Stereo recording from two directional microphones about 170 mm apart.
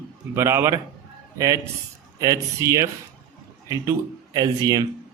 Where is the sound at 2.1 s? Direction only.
20° right (ahead or behind).